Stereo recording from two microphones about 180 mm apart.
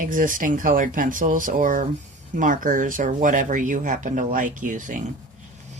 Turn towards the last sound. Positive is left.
turn(degrees=-45)  # may be behind; listen again after turning